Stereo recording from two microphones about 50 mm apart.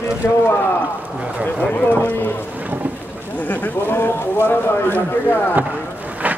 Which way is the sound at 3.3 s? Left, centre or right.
Left.